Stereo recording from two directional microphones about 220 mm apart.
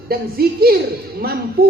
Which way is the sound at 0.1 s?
45° right (ahead or behind).